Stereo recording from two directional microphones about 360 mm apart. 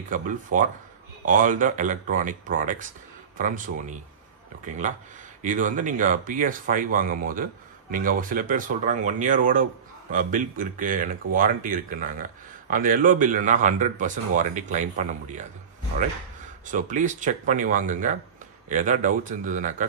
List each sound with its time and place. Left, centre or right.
0.1 s speech: right
5.4 s speech: right
16.6 s speech: right